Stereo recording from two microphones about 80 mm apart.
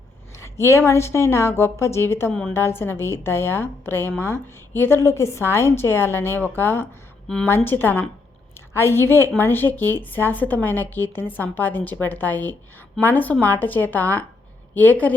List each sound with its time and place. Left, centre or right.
0.3 s a woman's voice: left